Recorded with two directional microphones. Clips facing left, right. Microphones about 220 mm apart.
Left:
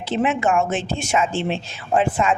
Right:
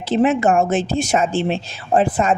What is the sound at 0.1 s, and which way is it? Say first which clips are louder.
A woman's voice: right 5 dB; 40° right (ahead or behind).